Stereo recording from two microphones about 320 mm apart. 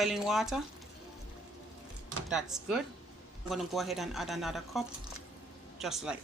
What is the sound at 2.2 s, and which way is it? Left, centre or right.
A woman's voice, centre.